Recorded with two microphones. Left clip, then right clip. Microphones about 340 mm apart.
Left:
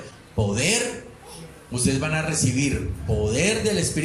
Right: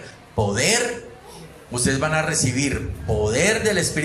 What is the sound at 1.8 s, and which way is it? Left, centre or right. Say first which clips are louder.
Speech: right 4 dB; right.